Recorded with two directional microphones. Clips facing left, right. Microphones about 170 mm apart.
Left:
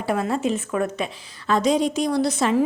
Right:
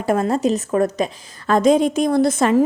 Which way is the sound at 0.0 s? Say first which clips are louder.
Right 5 dB; 45° right (ahead or behind).